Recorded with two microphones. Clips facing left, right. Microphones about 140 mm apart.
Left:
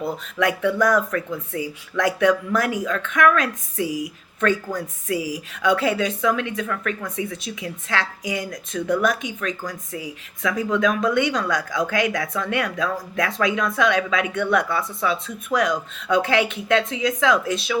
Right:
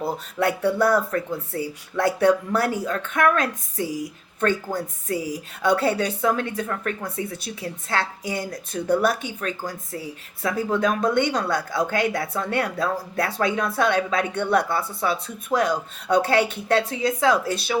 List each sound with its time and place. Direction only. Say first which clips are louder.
0.0 s speech: left 1 dB; 35° right (ahead or behind)
5.1 s speech: left 1 dB; 10° left (ahead or behind)
5.6 s speech: left 1 dB; 35° right (ahead or behind)